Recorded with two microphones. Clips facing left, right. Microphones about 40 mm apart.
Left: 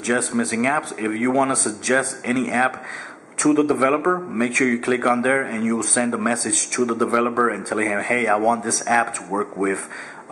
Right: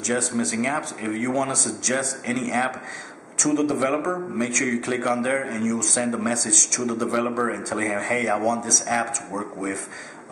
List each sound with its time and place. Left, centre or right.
0.0 s speech: centre